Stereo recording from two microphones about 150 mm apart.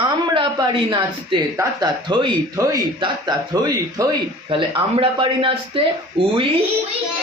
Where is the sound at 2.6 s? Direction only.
25° right (ahead or behind).